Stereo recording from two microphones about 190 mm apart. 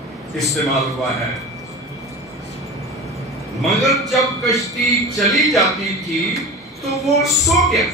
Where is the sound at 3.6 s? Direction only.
Centre (ahead or behind).